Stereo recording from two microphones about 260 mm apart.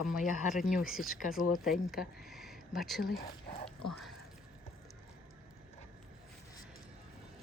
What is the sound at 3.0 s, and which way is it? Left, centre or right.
Speech, left.